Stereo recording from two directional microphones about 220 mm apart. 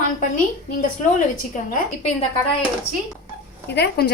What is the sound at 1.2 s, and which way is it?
Speech, 35° left (ahead or behind).